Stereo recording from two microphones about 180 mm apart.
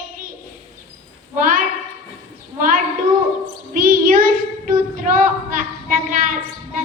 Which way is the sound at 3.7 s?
50° right (ahead or behind).